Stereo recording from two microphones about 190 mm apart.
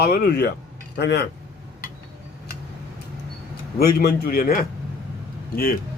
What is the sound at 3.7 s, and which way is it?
A man's voice, 50° left (ahead or behind).